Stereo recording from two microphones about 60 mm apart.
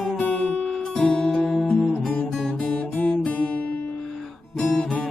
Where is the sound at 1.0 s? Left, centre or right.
Centre.